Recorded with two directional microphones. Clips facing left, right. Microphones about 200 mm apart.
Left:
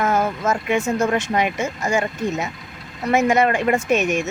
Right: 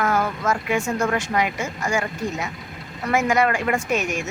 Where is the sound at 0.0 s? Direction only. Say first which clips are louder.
Left 2 dB; 25° left (ahead or behind).